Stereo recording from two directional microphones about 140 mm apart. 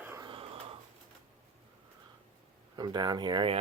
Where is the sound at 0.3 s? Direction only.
40° right (ahead or behind).